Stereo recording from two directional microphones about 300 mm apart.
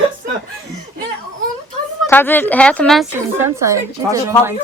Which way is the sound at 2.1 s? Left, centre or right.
Centre.